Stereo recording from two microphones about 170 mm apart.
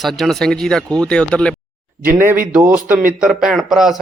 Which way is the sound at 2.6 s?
10° right (ahead or behind).